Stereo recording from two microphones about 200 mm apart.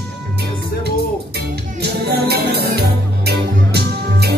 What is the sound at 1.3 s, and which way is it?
Music, 55° right (ahead or behind).